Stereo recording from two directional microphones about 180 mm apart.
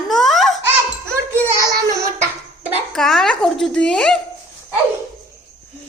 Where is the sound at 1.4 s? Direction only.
15° right (ahead or behind).